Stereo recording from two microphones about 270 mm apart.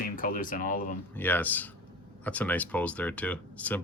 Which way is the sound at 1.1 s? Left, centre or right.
Centre.